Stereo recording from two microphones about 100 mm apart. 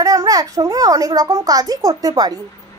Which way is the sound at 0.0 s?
35° right (ahead or behind).